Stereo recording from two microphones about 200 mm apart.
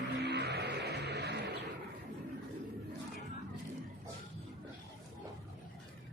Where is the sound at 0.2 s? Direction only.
55° right (ahead or behind).